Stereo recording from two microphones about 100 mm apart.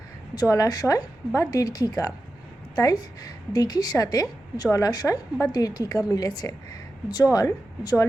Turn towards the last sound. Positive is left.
turn(degrees=40)  # may be behind; listen again after turning